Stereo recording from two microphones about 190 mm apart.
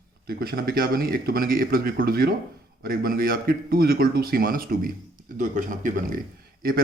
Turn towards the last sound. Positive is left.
turn(degrees=-50)  # may be behind; listen again after turning